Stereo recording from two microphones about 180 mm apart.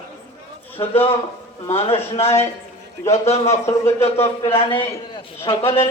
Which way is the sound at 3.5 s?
15° left (ahead or behind).